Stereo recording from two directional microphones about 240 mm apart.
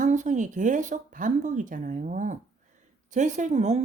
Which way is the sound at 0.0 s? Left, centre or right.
Right.